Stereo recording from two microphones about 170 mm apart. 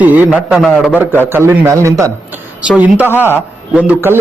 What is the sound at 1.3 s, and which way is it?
A man's voice, 15° right (ahead or behind).